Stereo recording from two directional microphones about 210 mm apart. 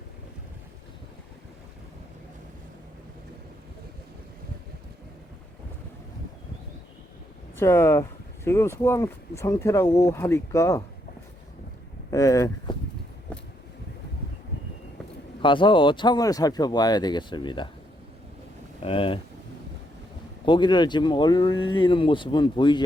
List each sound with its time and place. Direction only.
7.5 s speech: 10° left (ahead or behind)
12.1 s speech: 15° left (ahead or behind)
15.4 s speech: 25° left (ahead or behind)
18.8 s speech: 25° left (ahead or behind)
20.4 s speech: 20° left (ahead or behind)